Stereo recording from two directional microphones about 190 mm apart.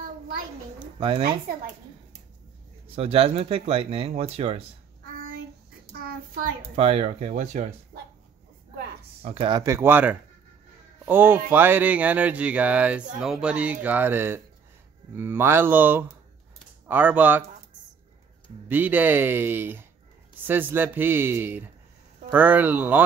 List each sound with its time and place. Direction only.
0.9 s a woman's voice: 30° right (ahead or behind)
3.0 s speech: 30° right (ahead or behind)
5.0 s child singing: 50° right (ahead or behind)
6.7 s speech: 30° right (ahead or behind)
9.2 s speech: 30° right (ahead or behind)
9.6 s speech: 15° right (ahead or behind)
18.7 s speech: 10° right (ahead or behind)